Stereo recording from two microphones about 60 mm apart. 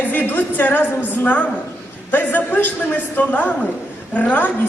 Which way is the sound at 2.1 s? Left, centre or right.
Left.